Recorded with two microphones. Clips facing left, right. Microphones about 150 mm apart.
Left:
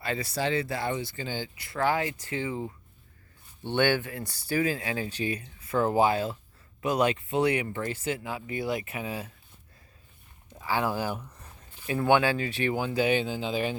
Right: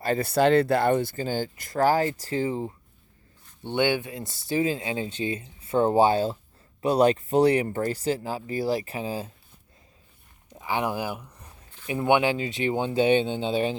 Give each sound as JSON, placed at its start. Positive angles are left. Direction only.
{"t": 0.0, "sound": "speech", "side_deg": -45}
{"t": 0.3, "sound": "speech", "side_deg": -60}
{"t": 3.6, "sound": "speech", "side_deg": -15}
{"t": 10.5, "sound": "speech", "side_deg": -20}